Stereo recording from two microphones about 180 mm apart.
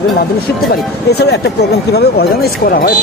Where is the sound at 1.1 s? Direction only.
65° left (ahead or behind).